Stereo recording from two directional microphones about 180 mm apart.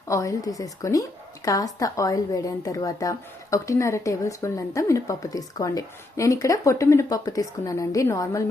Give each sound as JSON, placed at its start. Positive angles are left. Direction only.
{"t": 0.1, "sound": "a woman's voice", "side_deg": 20}